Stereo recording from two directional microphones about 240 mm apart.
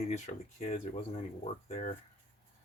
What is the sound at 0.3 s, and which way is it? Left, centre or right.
Speech, left.